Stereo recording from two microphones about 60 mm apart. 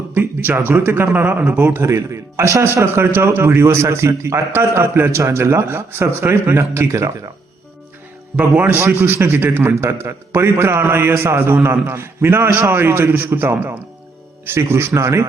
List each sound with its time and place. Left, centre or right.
0.1 s a sound: right
0.7 s a man's voice: right
1.1 s speech: right
1.8 s a man's voice: right
2.8 s a man's voice: right
8.4 s speech: right
8.8 s a man's voice: right
9.6 s a man's voice: right